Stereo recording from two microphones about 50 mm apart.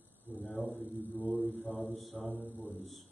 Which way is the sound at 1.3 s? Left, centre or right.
Left.